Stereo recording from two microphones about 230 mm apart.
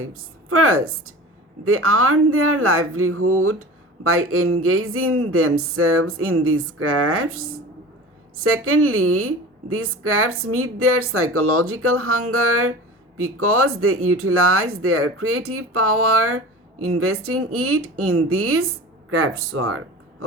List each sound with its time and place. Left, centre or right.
0.0 s speech: right
8.4 s speech: right